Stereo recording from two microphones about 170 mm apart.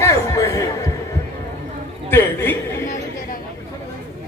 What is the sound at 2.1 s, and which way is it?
Speech, 15° left (ahead or behind).